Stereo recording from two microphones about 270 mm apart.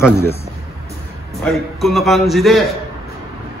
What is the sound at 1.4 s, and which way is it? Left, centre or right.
A man's voice, centre.